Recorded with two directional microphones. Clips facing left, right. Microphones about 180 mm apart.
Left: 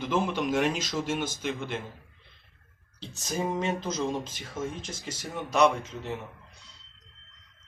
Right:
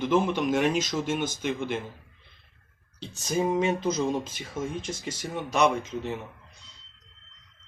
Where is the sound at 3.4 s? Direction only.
5° right (ahead or behind).